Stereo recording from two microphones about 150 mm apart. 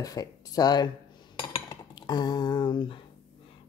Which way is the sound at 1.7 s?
30° left (ahead or behind).